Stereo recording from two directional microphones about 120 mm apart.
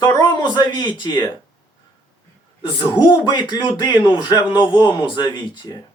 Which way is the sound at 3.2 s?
40° left (ahead or behind).